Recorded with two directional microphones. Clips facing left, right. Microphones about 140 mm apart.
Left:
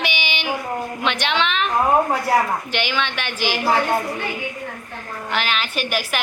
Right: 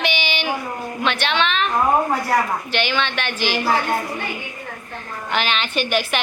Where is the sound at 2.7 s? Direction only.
10° left (ahead or behind).